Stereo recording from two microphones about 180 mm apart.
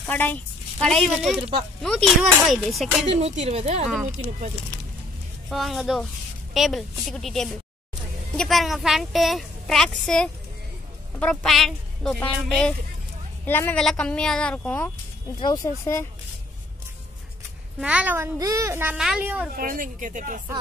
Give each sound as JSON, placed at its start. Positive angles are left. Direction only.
{"t": 0.0, "sound": "a woman's voice", "side_deg": 10}
{"t": 3.1, "sound": "speech", "side_deg": -35}
{"t": 5.5, "sound": "a woman's voice", "side_deg": 0}
{"t": 15.4, "sound": "speech", "side_deg": 20}
{"t": 17.7, "sound": "a child's voice", "side_deg": -5}
{"t": 19.5, "sound": "a woman's voice", "side_deg": -50}